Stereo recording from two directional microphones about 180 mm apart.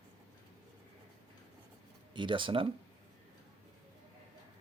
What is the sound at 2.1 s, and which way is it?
Speech, 25° right (ahead or behind).